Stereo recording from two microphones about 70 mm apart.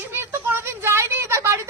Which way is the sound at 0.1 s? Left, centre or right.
Right.